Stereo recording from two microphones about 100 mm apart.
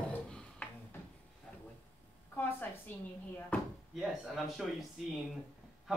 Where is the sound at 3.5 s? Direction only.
15° left (ahead or behind).